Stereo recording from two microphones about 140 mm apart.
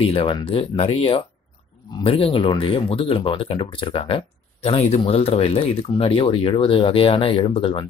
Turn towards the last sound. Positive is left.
turn(degrees=40)  # may be behind; listen again after turning